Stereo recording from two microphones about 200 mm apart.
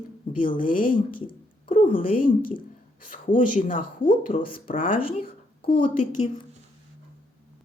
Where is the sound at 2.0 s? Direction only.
45° left (ahead or behind).